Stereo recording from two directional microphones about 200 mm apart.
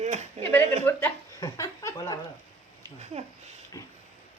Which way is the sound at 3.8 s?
15° left (ahead or behind).